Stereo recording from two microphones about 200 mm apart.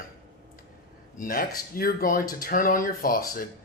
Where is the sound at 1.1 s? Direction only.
45° left (ahead or behind).